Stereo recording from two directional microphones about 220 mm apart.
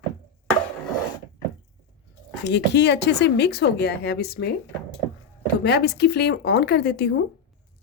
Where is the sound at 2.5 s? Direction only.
50° left (ahead or behind).